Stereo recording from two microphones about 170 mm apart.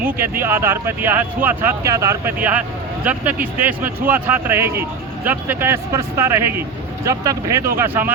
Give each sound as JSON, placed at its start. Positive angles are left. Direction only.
{"t": 0.0, "sound": "speech", "side_deg": -15}